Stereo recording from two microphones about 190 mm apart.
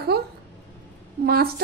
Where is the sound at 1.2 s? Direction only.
55° right (ahead or behind).